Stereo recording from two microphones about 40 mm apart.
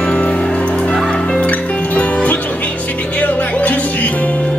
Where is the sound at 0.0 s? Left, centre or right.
Left.